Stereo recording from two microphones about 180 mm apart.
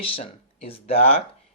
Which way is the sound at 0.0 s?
30° left (ahead or behind).